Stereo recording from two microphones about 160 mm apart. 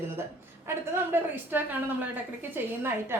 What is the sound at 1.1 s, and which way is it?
Speech, 15° right (ahead or behind).